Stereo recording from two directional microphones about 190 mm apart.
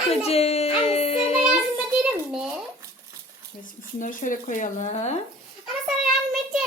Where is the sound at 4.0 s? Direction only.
45° left (ahead or behind).